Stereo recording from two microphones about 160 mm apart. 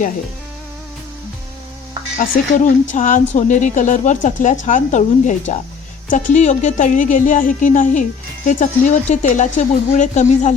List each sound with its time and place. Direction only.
2.1 s speech: 55° left (ahead or behind)